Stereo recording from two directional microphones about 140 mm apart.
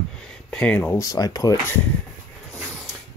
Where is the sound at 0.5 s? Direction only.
10° left (ahead or behind).